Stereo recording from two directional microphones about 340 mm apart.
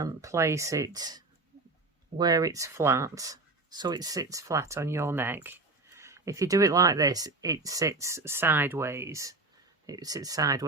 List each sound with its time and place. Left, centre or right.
0.0 s speech: centre